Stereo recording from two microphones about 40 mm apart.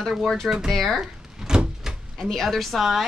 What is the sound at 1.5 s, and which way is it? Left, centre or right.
Door, centre.